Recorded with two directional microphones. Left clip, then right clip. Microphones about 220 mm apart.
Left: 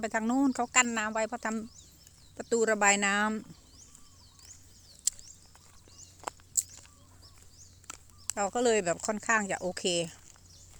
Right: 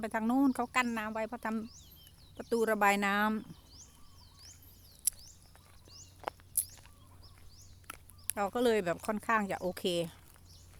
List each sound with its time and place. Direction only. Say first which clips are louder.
0.0 s speech: left 2 dB; 5° left (ahead or behind)
5.1 s a sound: left 6 dB; 5° right (ahead or behind)
6.2 s walk: left 1 dB; 55° left (ahead or behind)
8.4 s speech: left 3 dB; 5° right (ahead or behind)